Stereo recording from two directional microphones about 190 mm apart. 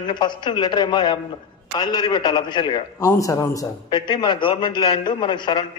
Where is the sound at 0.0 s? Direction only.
25° left (ahead or behind).